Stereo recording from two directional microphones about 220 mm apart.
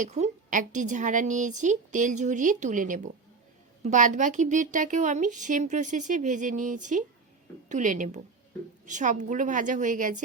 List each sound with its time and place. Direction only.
0.0 s a woman's voice: 35° right (ahead or behind)